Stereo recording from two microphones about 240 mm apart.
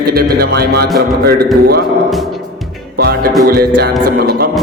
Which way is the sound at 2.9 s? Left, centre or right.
Right.